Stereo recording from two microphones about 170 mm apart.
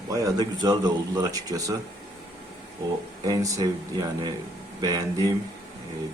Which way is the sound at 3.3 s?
20° right (ahead or behind).